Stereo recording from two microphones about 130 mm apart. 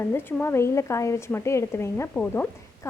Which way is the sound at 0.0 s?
15° left (ahead or behind).